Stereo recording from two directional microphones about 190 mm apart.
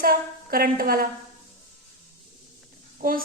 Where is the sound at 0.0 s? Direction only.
50° right (ahead or behind).